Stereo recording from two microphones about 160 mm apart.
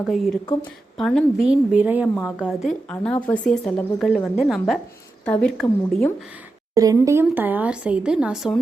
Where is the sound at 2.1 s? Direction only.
10° left (ahead or behind).